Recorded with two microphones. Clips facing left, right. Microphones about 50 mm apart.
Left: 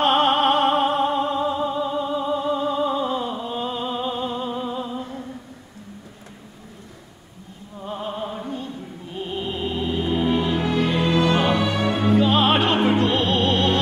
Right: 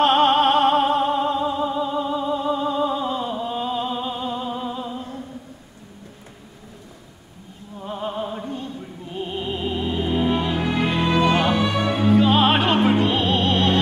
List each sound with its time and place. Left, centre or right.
0.0 s music: centre
7.8 s music: centre
10.9 s music: centre
11.1 s music: centre